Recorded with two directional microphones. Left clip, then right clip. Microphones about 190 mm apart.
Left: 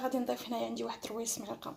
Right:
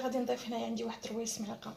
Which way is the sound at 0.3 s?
55° left (ahead or behind).